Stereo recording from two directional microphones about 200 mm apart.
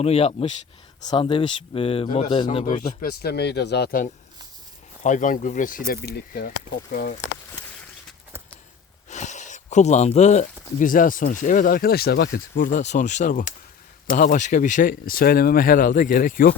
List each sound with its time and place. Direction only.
0.0 s speech: 30° left (ahead or behind)
3.1 s speech: 50° left (ahead or behind)
5.0 s speech: 40° left (ahead or behind)
9.0 s speech: 35° left (ahead or behind)